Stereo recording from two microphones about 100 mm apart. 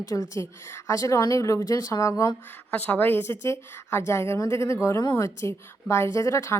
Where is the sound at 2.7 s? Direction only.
20° left (ahead or behind).